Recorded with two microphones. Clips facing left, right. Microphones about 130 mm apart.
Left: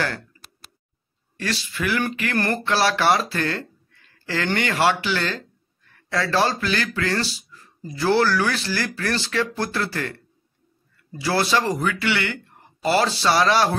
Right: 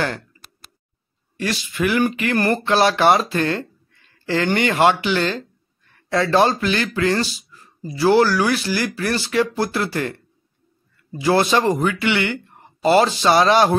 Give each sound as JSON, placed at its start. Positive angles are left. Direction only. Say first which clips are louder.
{"t": 1.3, "sound": "speech", "louder": "right 3 dB", "side_deg": -15}
{"t": 11.1, "sound": "speech", "louder": "right 4 dB", "side_deg": -20}